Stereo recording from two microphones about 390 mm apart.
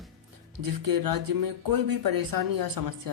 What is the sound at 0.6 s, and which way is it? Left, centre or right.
Speech, right.